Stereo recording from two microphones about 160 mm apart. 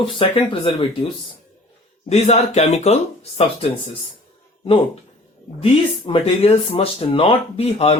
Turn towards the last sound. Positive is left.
turn(degrees=40)  # may be behind; listen again after turning